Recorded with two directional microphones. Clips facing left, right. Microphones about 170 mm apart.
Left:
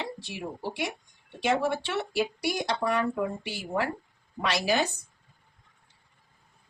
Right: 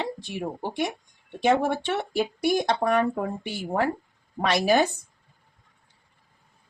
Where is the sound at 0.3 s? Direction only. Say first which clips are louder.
Right 4 dB; 55° right (ahead or behind).